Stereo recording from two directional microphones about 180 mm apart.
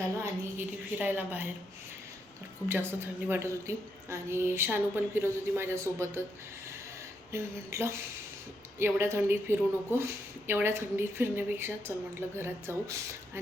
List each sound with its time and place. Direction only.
0.2 s speech: 10° right (ahead or behind)
2.6 s speech: 10° right (ahead or behind)
7.3 s speech: 15° right (ahead or behind)